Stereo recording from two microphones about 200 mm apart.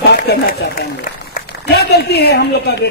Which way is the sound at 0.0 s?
55° left (ahead or behind).